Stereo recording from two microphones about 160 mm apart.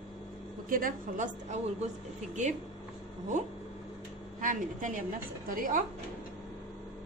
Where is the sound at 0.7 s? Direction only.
55° right (ahead or behind).